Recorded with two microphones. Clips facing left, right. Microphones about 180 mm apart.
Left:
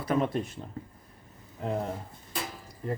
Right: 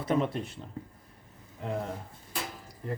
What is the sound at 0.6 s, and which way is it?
Speech, 45° left (ahead or behind).